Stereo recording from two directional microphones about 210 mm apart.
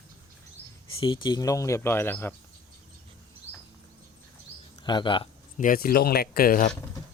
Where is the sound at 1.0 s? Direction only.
20° left (ahead or behind).